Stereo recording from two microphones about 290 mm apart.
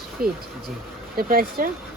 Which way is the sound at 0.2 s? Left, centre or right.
Right.